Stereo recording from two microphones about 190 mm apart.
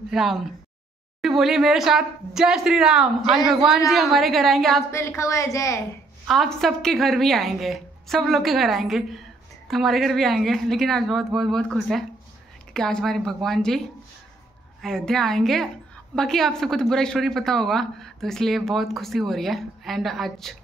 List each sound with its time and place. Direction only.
0.1 s a woman's voice: centre (ahead or behind)
4.9 s a woman's voice: 15° left (ahead or behind)
6.2 s a woman's voice: centre (ahead or behind)